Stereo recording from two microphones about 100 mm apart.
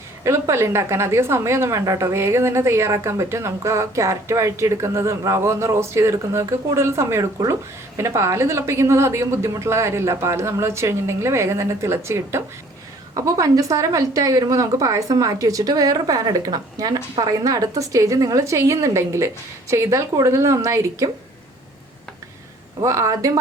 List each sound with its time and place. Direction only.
0.3 s a woman's voice: 25° right (ahead or behind)
22.8 s a woman's voice: 30° right (ahead or behind)